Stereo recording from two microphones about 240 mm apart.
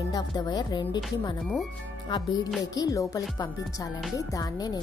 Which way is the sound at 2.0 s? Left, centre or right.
Centre.